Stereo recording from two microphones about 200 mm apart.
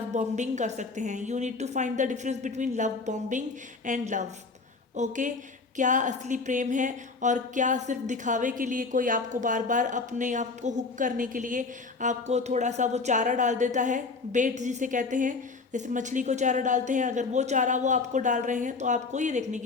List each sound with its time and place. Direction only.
0.1 s speech: 35° right (ahead or behind)